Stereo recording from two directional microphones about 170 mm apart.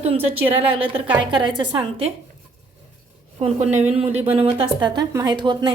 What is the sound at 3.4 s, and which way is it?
Speech, 40° right (ahead or behind).